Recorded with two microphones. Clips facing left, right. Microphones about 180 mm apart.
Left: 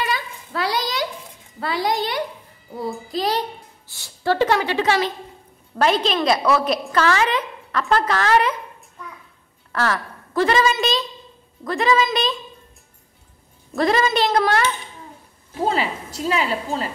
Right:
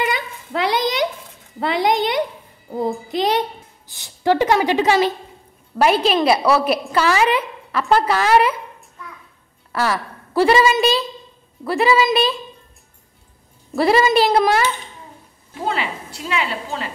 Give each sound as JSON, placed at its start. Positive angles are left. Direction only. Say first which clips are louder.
{"t": 0.0, "sound": "a sound", "louder": "right 3 dB", "side_deg": -20}
{"t": 1.6, "sound": "a woman's voice", "louder": "right 4 dB", "side_deg": -20}
{"t": 9.7, "sound": "a woman's voice", "louder": "right 2 dB", "side_deg": -10}
{"t": 13.7, "sound": "a woman's voice", "louder": "right 4 dB", "side_deg": -10}
{"t": 15.6, "sound": "a woman's voice", "louder": "left 2 dB", "side_deg": 35}